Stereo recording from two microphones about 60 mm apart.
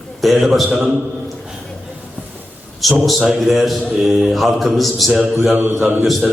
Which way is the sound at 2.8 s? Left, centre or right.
Centre.